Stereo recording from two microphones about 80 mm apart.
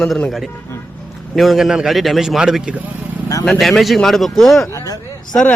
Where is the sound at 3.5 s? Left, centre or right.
Centre.